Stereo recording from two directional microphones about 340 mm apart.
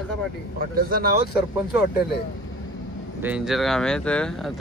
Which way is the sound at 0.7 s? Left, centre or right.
Right.